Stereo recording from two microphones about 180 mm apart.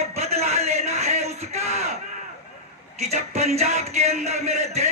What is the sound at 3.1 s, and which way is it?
Music, 35° right (ahead or behind).